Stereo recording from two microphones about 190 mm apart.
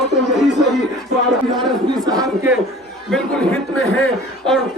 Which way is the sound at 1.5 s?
20° right (ahead or behind).